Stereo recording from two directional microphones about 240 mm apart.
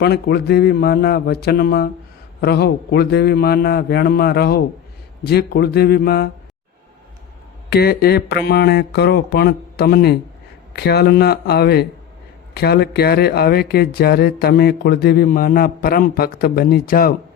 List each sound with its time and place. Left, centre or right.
0.0 s speech: left
7.7 s speech: left